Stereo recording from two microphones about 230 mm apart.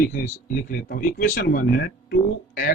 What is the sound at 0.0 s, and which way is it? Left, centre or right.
Speech, left.